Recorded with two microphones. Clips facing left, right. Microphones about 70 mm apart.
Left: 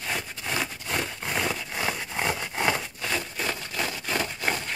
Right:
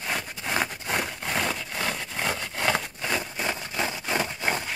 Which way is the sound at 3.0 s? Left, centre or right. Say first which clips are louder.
Right 1 dB; centre.